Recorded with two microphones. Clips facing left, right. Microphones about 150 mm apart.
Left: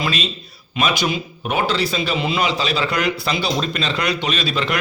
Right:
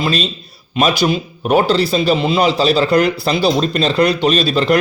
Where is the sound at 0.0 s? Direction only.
35° right (ahead or behind).